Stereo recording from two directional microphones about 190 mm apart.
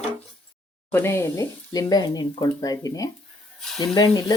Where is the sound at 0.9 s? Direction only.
10° left (ahead or behind).